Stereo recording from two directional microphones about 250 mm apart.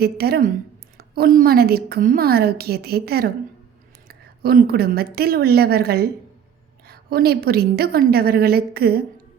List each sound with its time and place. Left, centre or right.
0.0 s a woman's voice: right